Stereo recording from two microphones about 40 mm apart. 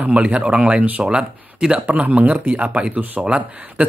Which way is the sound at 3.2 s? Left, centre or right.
Right.